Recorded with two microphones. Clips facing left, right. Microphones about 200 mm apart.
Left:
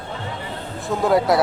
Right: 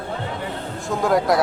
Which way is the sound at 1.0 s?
5° left (ahead or behind).